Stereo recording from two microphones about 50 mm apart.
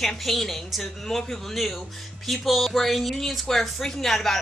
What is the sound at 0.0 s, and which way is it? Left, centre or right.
Speech, centre.